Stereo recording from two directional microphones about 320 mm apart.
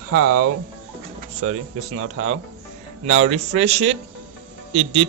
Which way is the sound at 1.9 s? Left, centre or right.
Right.